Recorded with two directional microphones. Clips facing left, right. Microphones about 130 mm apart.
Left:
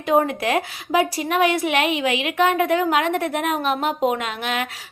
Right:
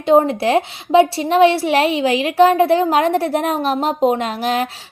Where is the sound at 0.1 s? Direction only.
30° right (ahead or behind).